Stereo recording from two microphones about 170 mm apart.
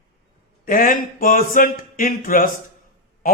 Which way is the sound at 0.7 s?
55° left (ahead or behind).